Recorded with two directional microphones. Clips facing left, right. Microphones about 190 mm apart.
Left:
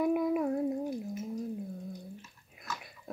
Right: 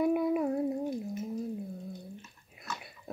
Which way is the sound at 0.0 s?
Centre (ahead or behind).